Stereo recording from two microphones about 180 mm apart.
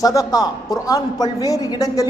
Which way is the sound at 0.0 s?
20° left (ahead or behind).